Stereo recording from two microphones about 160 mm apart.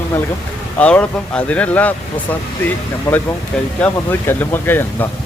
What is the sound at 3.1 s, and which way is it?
Speech, 15° left (ahead or behind).